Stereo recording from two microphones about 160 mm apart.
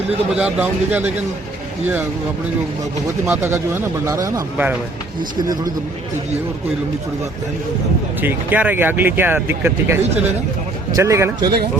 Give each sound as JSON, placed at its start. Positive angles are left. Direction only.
{"t": 0.3, "sound": "speech", "side_deg": -10}
{"t": 3.2, "sound": "a man's voice", "side_deg": -15}
{"t": 8.2, "sound": "a man's voice", "side_deg": -10}